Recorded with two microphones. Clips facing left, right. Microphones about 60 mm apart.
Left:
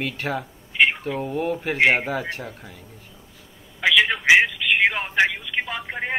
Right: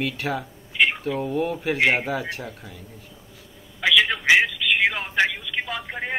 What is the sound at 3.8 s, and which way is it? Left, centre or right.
Telephone, centre.